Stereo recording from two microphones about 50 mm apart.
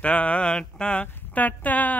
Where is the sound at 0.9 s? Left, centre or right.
Left.